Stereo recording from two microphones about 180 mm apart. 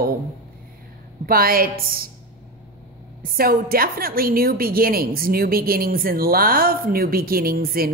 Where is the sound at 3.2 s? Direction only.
55° right (ahead or behind).